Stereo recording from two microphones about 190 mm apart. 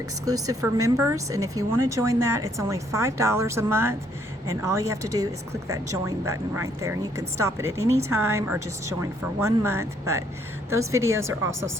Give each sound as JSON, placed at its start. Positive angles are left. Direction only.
{"t": 0.3, "sound": "speech", "side_deg": -20}